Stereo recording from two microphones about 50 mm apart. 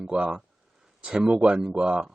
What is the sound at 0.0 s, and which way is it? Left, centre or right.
Speech, centre.